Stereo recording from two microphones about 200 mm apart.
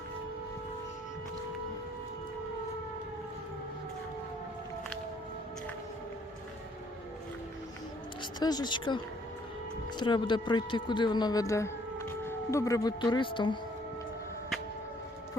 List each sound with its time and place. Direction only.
8.2 s speech: 20° left (ahead or behind)
10.0 s speech: 25° left (ahead or behind)